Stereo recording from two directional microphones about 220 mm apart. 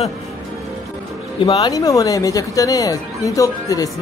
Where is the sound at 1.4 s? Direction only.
20° left (ahead or behind).